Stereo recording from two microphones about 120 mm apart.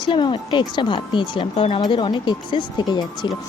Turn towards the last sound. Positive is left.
turn(degrees=40)  # may be behind; listen again after turning